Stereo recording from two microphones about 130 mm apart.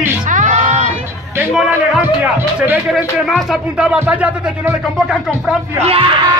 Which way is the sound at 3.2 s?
Centre (ahead or behind).